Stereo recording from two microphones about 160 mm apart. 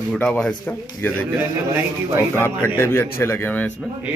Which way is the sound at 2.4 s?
15° left (ahead or behind).